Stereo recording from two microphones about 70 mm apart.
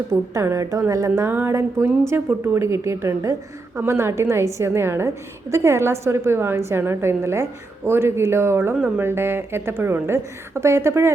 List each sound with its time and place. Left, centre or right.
0.1 s a woman's voice: right
1.3 s a woman's voice: right